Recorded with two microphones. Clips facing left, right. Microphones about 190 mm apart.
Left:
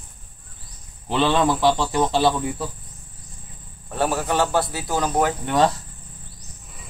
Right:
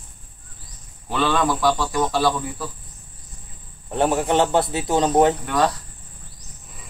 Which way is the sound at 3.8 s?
20° right (ahead or behind).